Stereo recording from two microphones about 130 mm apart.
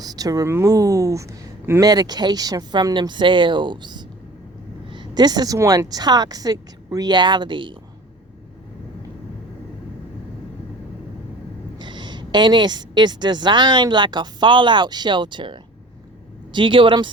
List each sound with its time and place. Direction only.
0.0 s a woman's voice: 30° right (ahead or behind)
11.8 s a woman's voice: 35° right (ahead or behind)